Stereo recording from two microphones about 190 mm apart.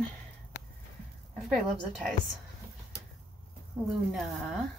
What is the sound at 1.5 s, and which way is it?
Speech, centre (ahead or behind).